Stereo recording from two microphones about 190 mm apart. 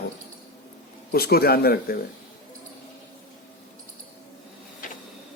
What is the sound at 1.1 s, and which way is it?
Speech, 55° left (ahead or behind).